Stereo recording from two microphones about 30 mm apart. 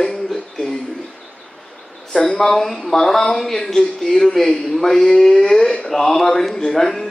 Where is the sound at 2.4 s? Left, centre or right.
Centre.